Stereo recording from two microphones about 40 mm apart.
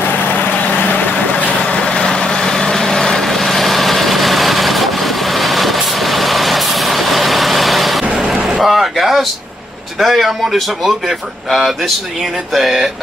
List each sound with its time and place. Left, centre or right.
0.4 s vehicle: left
1.4 s vehicle: left; by 8.1 s centre
8.4 s vehicle: centre
8.6 s a sound: centre
9.9 s speech: centre
12.5 s a sound: centre